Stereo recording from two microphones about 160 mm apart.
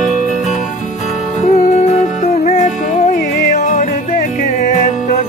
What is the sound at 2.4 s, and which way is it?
Music, 45° left (ahead or behind).